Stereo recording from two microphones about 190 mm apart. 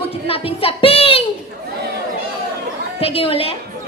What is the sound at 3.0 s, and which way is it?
Speech, 30° left (ahead or behind).